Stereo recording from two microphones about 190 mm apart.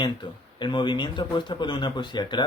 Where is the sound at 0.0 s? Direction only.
25° left (ahead or behind).